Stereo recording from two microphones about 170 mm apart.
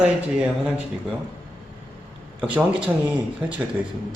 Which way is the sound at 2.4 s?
5° right (ahead or behind).